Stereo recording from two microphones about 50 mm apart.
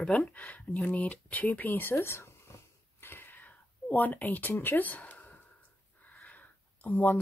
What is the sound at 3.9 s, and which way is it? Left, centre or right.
Speech, left.